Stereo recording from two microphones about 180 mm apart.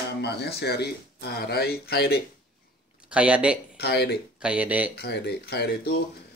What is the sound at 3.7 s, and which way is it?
Speech, 65° left (ahead or behind).